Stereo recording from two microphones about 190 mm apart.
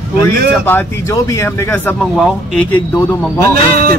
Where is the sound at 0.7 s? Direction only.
15° left (ahead or behind).